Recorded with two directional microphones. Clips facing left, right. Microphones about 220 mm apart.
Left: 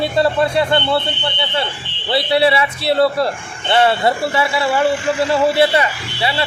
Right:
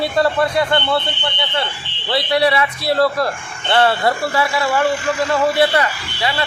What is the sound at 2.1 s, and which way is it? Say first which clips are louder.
Speech: left 2 dB; 25° left (ahead or behind).